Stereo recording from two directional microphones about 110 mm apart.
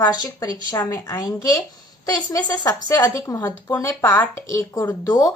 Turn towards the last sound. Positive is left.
turn(degrees=30)  # may be behind; listen again after turning